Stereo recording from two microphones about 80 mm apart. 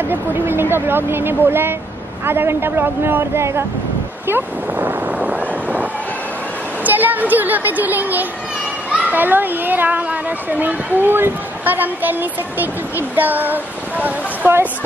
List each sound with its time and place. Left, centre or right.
0.1 s speech: right
4.3 s a sound: right
6.8 s speech: right